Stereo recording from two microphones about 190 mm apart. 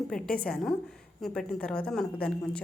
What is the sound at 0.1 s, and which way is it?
A woman's voice, 5° left (ahead or behind).